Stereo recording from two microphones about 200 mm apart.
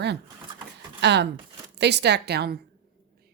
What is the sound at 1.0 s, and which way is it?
Speech, 55° right (ahead or behind).